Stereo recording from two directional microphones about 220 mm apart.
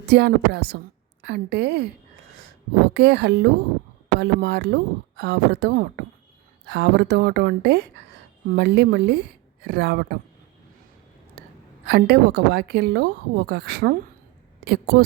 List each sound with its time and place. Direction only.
0.1 s a woman's voice: 50° right (ahead or behind)
2.9 s a woman's voice: 50° right (ahead or behind)
11.9 s a woman's voice: 50° right (ahead or behind)